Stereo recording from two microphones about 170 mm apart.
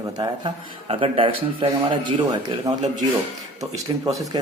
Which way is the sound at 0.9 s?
30° right (ahead or behind).